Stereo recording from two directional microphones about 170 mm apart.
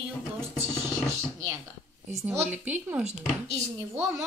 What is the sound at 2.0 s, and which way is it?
Speech, 15° right (ahead or behind).